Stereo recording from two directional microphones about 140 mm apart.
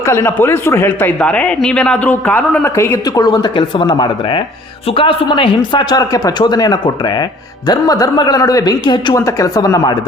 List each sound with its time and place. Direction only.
0.0 s a man's voice: 20° left (ahead or behind)